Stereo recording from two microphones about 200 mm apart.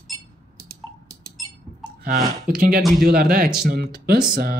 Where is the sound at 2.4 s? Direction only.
45° right (ahead or behind).